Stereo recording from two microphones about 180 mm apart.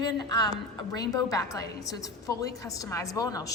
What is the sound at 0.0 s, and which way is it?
A woman's voice, 20° left (ahead or behind).